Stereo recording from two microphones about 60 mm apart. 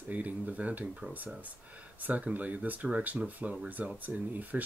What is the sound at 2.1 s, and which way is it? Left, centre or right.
Speech, right.